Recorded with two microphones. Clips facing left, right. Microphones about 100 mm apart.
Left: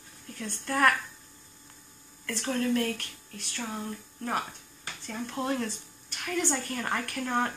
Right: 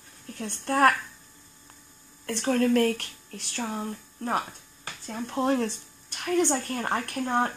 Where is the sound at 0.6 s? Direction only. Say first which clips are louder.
Right 4 dB; 40° right (ahead or behind).